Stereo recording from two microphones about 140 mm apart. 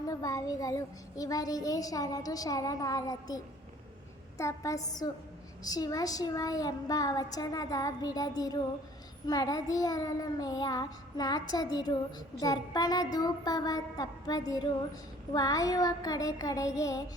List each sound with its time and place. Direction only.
0.1 s a child's voice: 25° left (ahead or behind)